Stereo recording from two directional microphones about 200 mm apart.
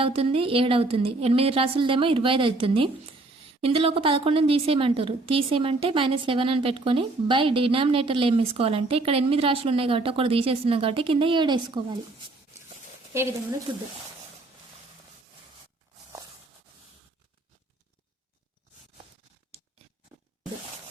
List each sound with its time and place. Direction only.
0.0 s a woman's voice: 30° right (ahead or behind)
13.1 s speech: 15° right (ahead or behind)